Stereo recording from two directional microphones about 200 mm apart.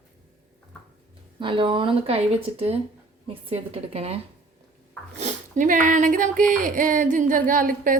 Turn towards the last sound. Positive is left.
turn(degrees=-40)  # may be behind; listen again after turning